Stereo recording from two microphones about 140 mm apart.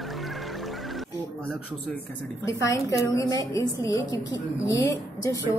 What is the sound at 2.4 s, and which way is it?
A woman's voice, 20° left (ahead or behind).